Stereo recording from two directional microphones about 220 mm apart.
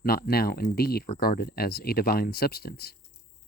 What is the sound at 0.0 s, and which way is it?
Speech, 45° left (ahead or behind).